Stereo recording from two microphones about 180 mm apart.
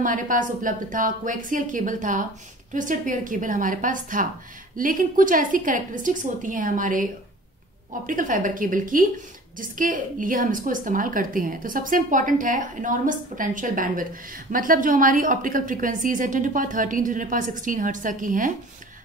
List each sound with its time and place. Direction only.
0.0 s a woman's voice: 45° right (ahead or behind)
8.1 s a woman's voice: 50° right (ahead or behind)